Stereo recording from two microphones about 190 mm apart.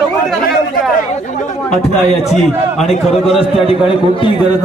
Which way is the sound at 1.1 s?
40° left (ahead or behind).